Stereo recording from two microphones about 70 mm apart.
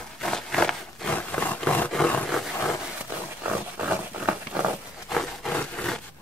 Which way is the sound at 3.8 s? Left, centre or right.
Centre.